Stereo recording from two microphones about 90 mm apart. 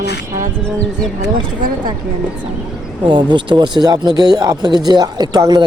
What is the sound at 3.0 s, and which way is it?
Speech, 60° right (ahead or behind).